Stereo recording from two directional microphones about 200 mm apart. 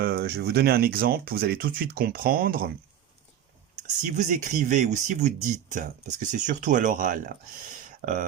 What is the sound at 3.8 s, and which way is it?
Speech, 40° right (ahead or behind).